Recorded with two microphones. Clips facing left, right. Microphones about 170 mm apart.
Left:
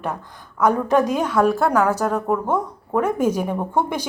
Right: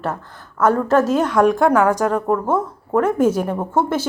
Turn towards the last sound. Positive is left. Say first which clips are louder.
# right 3 dB
turn(degrees=15)  # may be behind; listen again after turning